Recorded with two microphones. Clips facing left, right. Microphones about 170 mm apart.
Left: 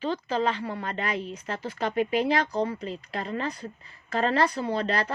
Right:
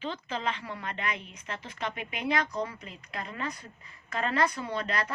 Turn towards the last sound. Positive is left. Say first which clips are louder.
# left 5 dB
turn(degrees=30)  # may be behind; listen again after turning